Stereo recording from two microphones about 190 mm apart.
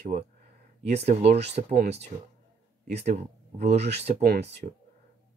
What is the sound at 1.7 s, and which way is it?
Speech, 60° right (ahead or behind).